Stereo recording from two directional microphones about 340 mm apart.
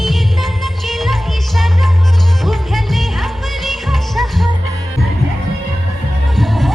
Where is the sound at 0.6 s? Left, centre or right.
Centre.